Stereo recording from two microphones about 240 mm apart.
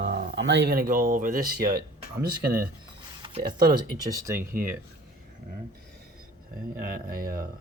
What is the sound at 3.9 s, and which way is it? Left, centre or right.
Speech, centre.